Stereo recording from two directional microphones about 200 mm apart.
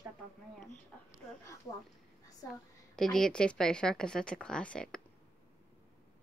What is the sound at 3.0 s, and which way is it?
Speech, 5° left (ahead or behind).